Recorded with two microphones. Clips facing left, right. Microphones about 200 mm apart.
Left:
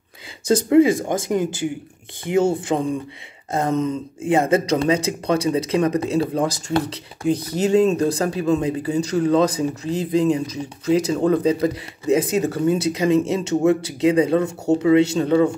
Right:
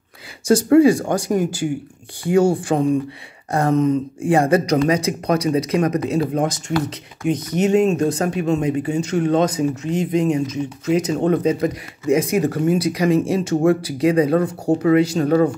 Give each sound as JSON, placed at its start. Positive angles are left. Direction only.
{"t": 0.5, "sound": "speech", "side_deg": 20}
{"t": 3.5, "sound": "speech", "side_deg": 20}